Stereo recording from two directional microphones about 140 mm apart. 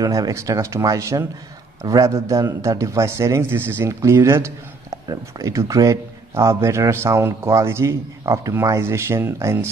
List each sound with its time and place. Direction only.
0.0 s speech: 25° right (ahead or behind)